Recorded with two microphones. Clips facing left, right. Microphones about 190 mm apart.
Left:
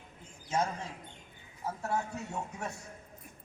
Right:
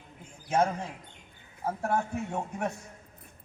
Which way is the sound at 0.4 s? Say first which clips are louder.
Right 6 dB; 60° right (ahead or behind).